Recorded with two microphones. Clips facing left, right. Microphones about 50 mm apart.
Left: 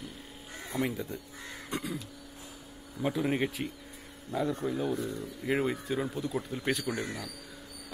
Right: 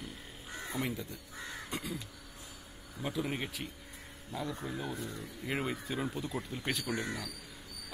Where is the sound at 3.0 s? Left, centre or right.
Centre.